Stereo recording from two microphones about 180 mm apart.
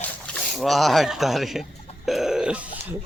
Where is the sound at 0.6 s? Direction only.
Centre (ahead or behind).